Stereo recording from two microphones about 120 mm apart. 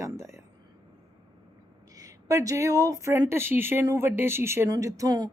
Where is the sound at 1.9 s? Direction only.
30° right (ahead or behind).